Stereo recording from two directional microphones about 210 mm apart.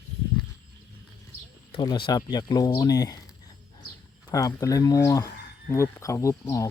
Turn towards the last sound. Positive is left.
turn(degrees=15)  # may be behind; listen again after turning